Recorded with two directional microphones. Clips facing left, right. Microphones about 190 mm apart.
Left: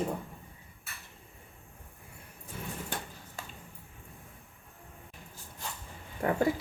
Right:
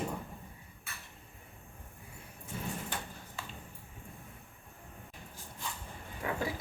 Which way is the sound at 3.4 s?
45° left (ahead or behind).